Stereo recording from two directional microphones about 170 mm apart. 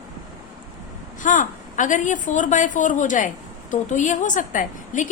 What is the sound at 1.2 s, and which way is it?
A woman's voice, 50° left (ahead or behind).